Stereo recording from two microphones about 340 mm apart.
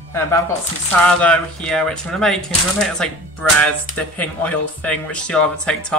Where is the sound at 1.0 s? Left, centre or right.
Centre.